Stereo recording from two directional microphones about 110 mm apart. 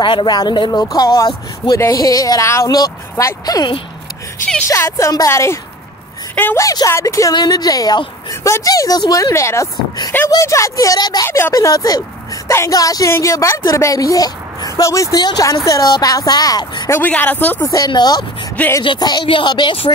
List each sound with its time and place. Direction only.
0.0 s a woman's voice: 45° left (ahead or behind); by 6.6 s 20° left (ahead or behind)
6.6 s a woman's voice: 35° left (ahead or behind)
11.2 s a woman's voice: 20° left (ahead or behind)
11.5 s a woman's voice: 35° left (ahead or behind)
16.9 s a woman's voice: 15° left (ahead or behind)
17.6 s a woman's voice: 35° left (ahead or behind)